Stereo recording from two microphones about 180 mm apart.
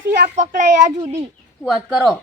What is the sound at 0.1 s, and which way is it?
Speech, 45° right (ahead or behind).